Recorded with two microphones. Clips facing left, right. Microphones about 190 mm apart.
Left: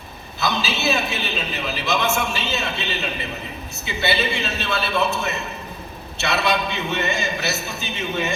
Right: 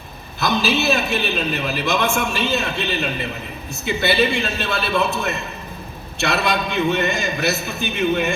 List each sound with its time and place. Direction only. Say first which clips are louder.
0.3 s a man's voice: right 5 dB; 55° right (ahead or behind)